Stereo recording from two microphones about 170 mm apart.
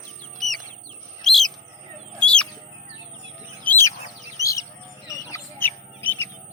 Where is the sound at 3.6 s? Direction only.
15° left (ahead or behind).